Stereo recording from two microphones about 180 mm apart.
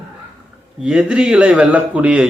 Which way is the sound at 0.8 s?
5° right (ahead or behind).